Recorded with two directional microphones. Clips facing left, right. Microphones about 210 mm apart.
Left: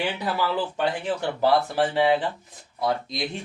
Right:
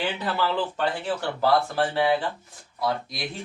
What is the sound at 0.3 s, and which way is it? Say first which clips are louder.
Speech: even; 10° left (ahead or behind).